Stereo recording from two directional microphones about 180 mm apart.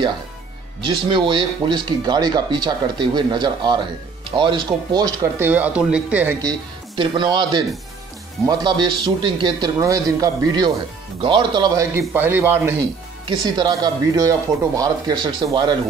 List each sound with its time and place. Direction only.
0.8 s speech: 25° right (ahead or behind); by 6.3 s 5° right (ahead or behind)
7.0 s speech: 25° right (ahead or behind)
13.6 s speech: 25° right (ahead or behind)